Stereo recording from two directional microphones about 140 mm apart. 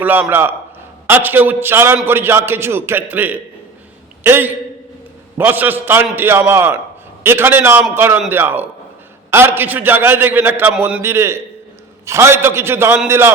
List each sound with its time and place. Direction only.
0.0 s a man's voice: 15° right (ahead or behind)